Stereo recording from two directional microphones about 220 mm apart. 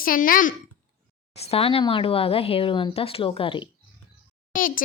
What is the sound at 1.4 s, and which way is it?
Speech, 25° left (ahead or behind).